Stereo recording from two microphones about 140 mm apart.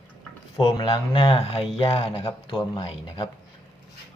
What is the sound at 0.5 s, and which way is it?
Speech, 35° left (ahead or behind).